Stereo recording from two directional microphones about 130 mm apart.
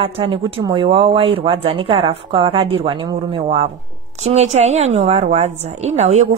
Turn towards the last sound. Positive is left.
turn(degrees=-60)  # may be behind; listen again after turning